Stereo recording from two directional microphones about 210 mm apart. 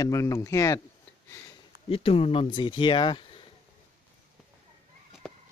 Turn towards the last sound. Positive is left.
turn(degrees=5)  # may be behind; listen again after turning